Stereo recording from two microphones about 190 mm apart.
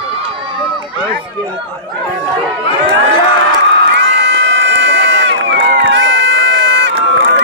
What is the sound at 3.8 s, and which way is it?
Crowd, 70° right (ahead or behind).